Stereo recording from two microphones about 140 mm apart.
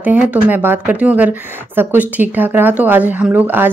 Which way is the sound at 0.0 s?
10° right (ahead or behind).